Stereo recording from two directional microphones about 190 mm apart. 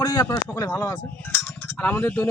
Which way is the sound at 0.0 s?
20° left (ahead or behind).